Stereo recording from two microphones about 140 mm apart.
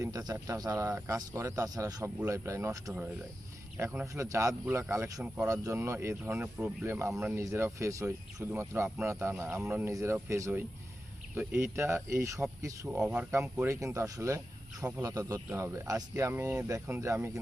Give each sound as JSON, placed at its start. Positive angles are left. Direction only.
{"t": 0.0, "sound": "speech", "side_deg": -25}
{"t": 6.3, "sound": "speech", "side_deg": -10}
{"t": 12.9, "sound": "speech", "side_deg": -5}
{"t": 13.3, "sound": "speech", "side_deg": -20}